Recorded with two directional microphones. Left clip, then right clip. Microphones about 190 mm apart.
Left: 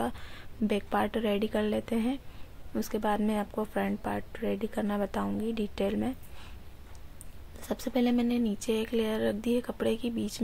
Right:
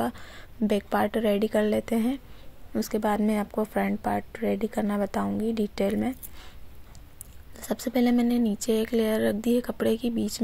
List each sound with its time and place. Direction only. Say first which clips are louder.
0.0 s speech: right 4 dB; 20° right (ahead or behind)
7.6 s speech: right 4 dB; 20° right (ahead or behind)